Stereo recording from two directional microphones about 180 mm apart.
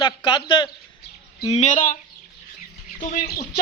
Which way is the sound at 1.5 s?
45° left (ahead or behind).